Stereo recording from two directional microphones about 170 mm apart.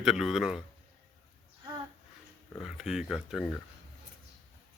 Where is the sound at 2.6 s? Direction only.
Centre (ahead or behind).